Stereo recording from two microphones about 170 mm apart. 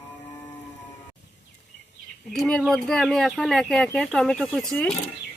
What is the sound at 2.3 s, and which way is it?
Speech, 5° left (ahead or behind).